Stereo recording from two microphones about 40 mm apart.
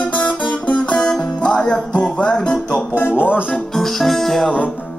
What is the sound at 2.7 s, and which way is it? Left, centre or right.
Music, left.